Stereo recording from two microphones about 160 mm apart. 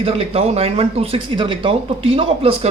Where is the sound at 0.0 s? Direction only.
35° right (ahead or behind).